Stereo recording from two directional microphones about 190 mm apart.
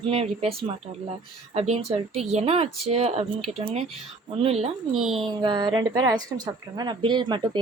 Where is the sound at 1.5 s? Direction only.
35° right (ahead or behind).